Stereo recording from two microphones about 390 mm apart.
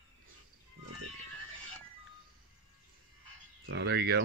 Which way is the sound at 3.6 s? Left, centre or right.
Right.